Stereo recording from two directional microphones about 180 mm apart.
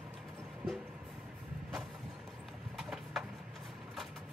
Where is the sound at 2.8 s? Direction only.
Centre (ahead or behind).